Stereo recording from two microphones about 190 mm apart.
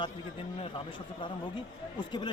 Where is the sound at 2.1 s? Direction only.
25° left (ahead or behind).